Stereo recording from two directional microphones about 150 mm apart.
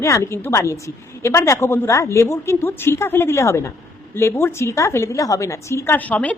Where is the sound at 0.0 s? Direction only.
20° left (ahead or behind).